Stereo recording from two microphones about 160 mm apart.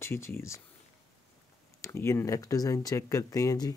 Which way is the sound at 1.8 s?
15° left (ahead or behind).